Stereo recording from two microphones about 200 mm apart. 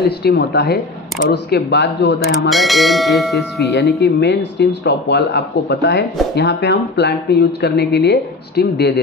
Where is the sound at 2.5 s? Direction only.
Centre (ahead or behind).